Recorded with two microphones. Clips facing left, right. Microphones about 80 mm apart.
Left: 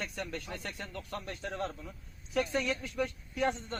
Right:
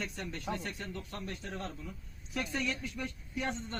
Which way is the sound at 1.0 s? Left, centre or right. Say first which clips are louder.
Left 2 dB; left.